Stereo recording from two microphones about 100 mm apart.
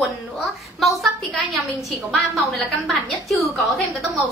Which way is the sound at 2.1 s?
Centre (ahead or behind).